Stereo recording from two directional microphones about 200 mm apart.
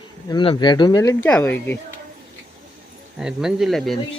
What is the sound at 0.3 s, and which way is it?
Speech, 20° left (ahead or behind).